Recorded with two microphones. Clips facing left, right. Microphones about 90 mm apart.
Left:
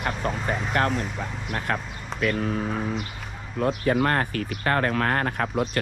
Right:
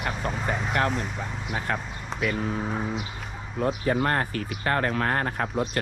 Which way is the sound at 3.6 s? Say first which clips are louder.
Left 2 dB; 60° left (ahead or behind).